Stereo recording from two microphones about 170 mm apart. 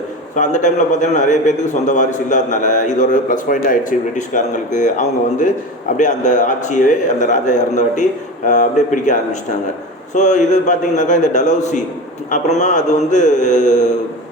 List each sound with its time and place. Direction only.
0.3 s a man's voice: 45° left (ahead or behind)